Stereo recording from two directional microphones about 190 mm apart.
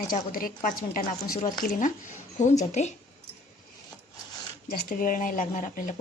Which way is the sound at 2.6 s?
35° left (ahead or behind).